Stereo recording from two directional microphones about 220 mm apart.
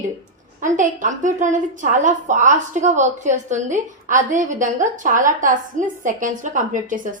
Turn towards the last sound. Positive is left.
turn(degrees=-35)  # may be behind; listen again after turning